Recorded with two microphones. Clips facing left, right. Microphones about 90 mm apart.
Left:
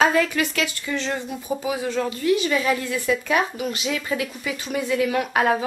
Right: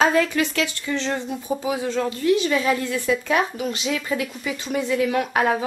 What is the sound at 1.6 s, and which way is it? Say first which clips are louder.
Speech: even; 20° right (ahead or behind).